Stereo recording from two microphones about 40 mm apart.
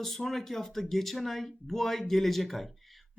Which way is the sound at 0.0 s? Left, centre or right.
Centre.